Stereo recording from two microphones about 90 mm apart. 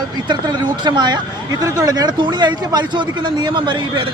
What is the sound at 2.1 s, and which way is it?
Speech, 60° right (ahead or behind).